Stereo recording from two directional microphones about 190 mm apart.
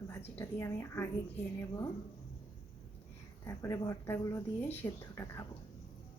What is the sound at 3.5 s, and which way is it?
Speech, 15° left (ahead or behind).